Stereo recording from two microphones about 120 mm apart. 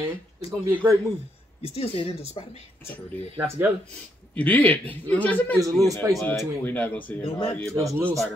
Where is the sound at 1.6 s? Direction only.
55° left (ahead or behind).